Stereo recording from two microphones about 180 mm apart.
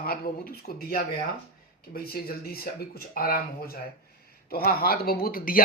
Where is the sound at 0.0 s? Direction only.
55° left (ahead or behind).